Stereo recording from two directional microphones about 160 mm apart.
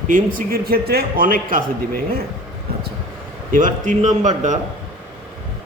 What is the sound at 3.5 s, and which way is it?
A man's voice, 55° right (ahead or behind).